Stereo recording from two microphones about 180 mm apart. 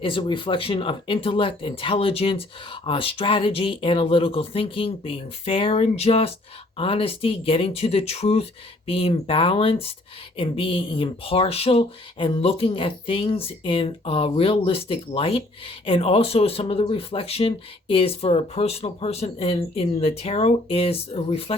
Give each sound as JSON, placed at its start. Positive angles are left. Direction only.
{"t": 0.0, "sound": "speech", "side_deg": 30}